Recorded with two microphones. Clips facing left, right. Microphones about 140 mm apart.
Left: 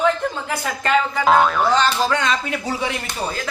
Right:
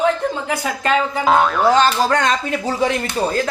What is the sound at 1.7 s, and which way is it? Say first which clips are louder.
Speech: right 3 dB; 45° right (ahead or behind).